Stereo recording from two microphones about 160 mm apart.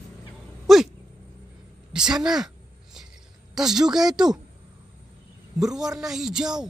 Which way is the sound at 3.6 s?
5° right (ahead or behind).